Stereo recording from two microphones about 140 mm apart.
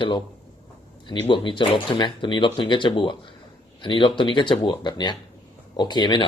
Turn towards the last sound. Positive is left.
turn(degrees=30)  # may be behind; listen again after turning